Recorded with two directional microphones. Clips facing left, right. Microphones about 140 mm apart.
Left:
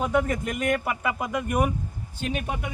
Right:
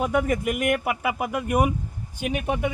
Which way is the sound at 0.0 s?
10° right (ahead or behind).